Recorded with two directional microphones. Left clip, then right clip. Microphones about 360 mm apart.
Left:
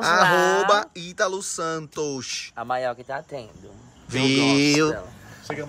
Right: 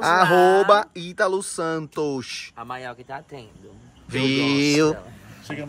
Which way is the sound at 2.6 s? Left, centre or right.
Left.